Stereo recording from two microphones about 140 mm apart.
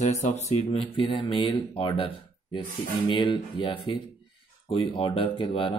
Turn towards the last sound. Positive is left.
turn(degrees=40)  # may be behind; listen again after turning